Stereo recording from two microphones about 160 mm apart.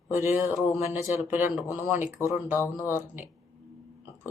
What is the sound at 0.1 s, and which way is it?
Speech, 15° right (ahead or behind).